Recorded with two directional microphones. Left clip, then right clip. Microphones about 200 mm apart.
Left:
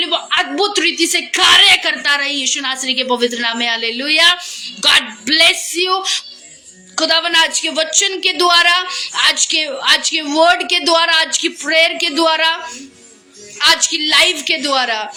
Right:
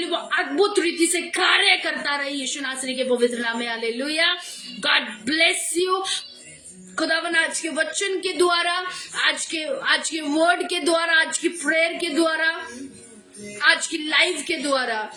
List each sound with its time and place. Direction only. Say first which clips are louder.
0.0 s a woman's voice: left 8 dB; 15° right (ahead or behind)
13.6 s a woman's voice: left 7 dB; 15° right (ahead or behind)